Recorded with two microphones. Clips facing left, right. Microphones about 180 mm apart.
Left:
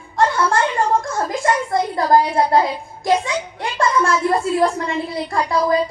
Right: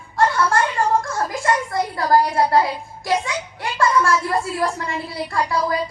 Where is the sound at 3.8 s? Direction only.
20° left (ahead or behind).